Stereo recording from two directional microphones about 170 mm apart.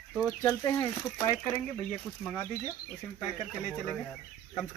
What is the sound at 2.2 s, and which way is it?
Speech, 5° left (ahead or behind).